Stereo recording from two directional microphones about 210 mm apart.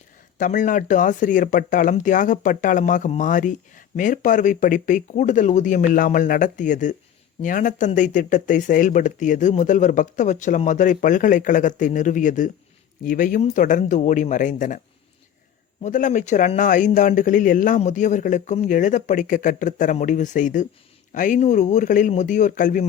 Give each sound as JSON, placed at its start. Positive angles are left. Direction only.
{"t": 0.3, "sound": "speech", "side_deg": 40}
{"t": 15.8, "sound": "speech", "side_deg": 35}